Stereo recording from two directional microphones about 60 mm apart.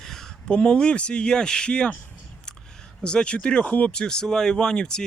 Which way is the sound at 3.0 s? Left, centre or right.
Centre.